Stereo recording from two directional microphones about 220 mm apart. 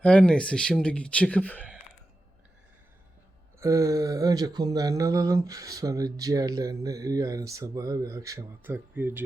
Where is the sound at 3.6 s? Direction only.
15° right (ahead or behind).